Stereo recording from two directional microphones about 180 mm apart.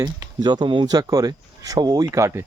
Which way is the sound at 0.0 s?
20° right (ahead or behind).